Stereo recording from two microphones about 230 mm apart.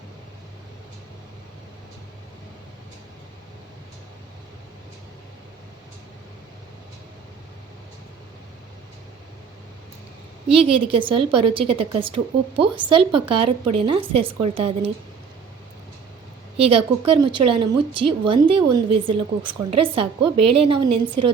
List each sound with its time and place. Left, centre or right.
10.5 s a woman's voice: right
16.6 s a woman's voice: right